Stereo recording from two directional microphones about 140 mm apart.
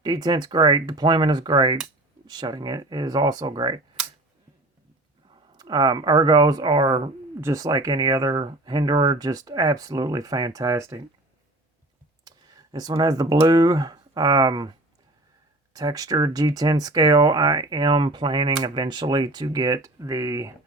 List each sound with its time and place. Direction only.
0.0 s speech: 30° right (ahead or behind)
5.5 s speech: 30° right (ahead or behind)
12.2 s speech: 25° right (ahead or behind)